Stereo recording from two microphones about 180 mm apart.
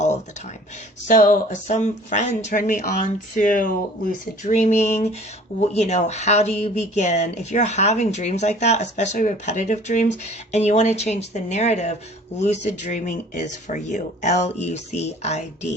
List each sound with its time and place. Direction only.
1.0 s speech: 45° left (ahead or behind)